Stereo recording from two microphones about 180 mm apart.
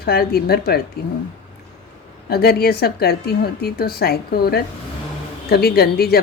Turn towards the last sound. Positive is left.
turn(degrees=60)  # may be behind; listen again after turning